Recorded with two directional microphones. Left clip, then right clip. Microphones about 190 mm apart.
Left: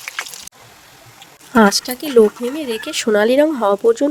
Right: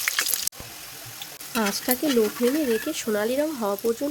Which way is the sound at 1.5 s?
50° left (ahead or behind).